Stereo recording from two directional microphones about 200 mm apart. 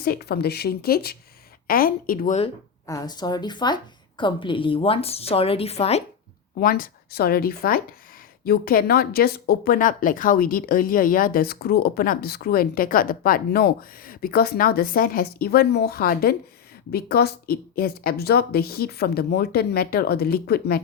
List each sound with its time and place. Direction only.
0.0 s speech: 50° left (ahead or behind)
2.8 s a woman's voice: 15° left (ahead or behind)
6.6 s speech: 45° left (ahead or behind)